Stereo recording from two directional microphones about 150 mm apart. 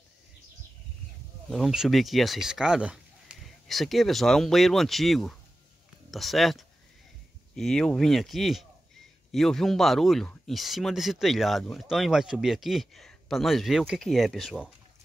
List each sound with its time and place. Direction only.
1.5 s speech: centre (ahead or behind)